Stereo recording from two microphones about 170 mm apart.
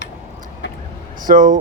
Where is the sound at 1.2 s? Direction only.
50° right (ahead or behind).